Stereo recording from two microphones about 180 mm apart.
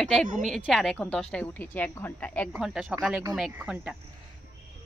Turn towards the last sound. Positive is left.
turn(degrees=-5)  # may be behind; listen again after turning